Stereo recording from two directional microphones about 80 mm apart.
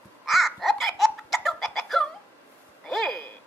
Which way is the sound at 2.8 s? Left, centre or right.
Centre.